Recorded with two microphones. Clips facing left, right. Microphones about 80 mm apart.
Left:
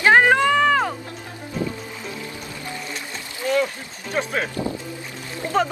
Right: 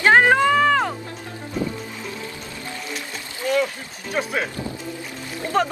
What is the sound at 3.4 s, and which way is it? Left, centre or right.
Rowboat, centre.